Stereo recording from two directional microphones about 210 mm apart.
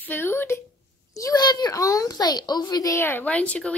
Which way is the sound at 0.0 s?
10° left (ahead or behind).